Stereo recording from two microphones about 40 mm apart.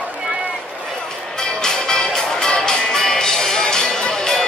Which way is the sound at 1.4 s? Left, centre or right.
Centre.